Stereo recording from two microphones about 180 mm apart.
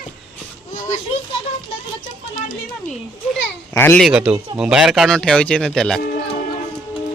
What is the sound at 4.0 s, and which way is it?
A man's voice, 5° right (ahead or behind).